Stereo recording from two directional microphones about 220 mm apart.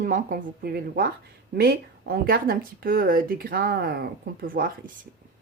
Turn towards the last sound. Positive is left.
turn(degrees=-40)  # may be behind; listen again after turning